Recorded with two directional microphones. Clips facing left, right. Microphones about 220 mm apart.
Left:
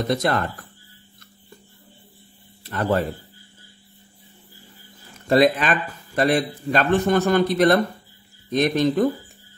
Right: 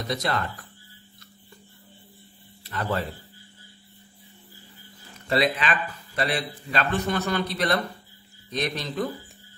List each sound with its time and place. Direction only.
0.1 s speech: 50° left (ahead or behind)
2.6 s speech: 50° left (ahead or behind)
5.3 s speech: 45° left (ahead or behind)